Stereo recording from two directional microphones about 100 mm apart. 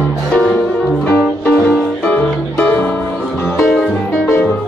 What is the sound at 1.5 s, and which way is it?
Music, 10° left (ahead or behind).